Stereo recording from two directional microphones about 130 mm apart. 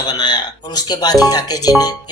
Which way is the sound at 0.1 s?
35° left (ahead or behind).